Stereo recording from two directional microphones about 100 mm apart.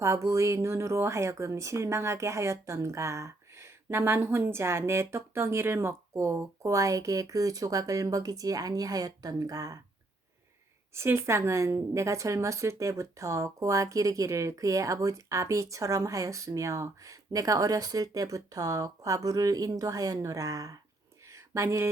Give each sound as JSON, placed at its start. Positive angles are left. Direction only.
{"t": 0.0, "sound": "speech", "side_deg": -30}
{"t": 10.9, "sound": "a woman's voice", "side_deg": -25}
{"t": 21.2, "sound": "a sound", "side_deg": -30}